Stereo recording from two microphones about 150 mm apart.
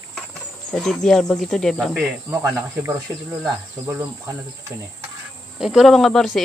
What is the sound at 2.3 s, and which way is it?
Speech, 20° right (ahead or behind).